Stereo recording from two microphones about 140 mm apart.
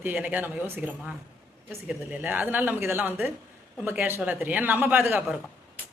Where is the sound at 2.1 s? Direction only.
10° right (ahead or behind).